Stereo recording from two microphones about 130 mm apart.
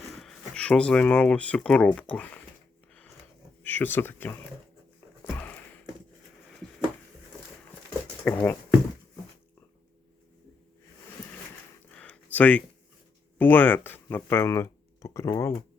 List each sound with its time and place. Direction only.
0.2 s speech: 5° left (ahead or behind)
3.6 s speech: 15° left (ahead or behind)
8.2 s speech: 15° left (ahead or behind)
11.9 s a sound: 10° left (ahead or behind)
13.4 s speech: 15° left (ahead or behind)